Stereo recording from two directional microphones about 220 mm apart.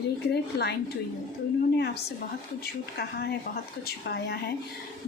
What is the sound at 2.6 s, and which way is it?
A woman's voice, 45° left (ahead or behind).